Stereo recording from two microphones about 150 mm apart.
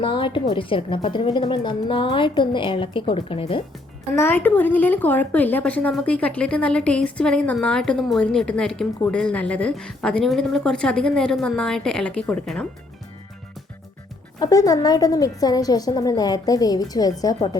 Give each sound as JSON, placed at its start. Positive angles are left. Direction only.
{"t": 0.0, "sound": "a woman's voice", "side_deg": 35}
{"t": 4.1, "sound": "speech", "side_deg": 15}
{"t": 14.3, "sound": "a woman's voice", "side_deg": 25}